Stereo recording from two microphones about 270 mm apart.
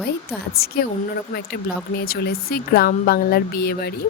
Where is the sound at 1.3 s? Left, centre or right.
Left.